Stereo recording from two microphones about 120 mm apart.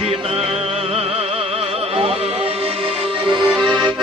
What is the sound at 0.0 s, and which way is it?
Music, 55° right (ahead or behind).